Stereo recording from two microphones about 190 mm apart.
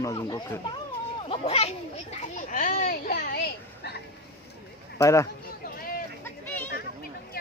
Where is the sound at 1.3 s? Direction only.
30° left (ahead or behind); by 3.9 s 55° left (ahead or behind).